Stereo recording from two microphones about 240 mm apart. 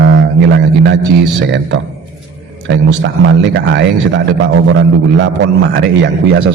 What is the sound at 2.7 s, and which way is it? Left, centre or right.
Speech, right.